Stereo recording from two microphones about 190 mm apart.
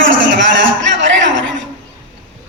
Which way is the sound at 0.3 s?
70° right (ahead or behind).